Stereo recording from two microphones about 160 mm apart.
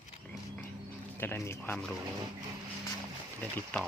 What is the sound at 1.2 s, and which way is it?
Speech, 15° left (ahead or behind).